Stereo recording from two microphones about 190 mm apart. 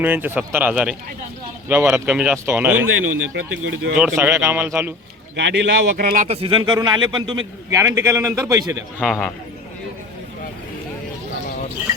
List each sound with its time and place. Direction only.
0.0 s speech: 10° right (ahead or behind)
3.0 s speech: 90° right
3.9 s speech: 10° right (ahead or behind)
5.4 s a man's voice: 70° right (ahead or behind); by 6.2 s 55° right (ahead or behind)
6.2 s speech: 30° right (ahead or behind)
9.0 s speech: 5° left (ahead or behind)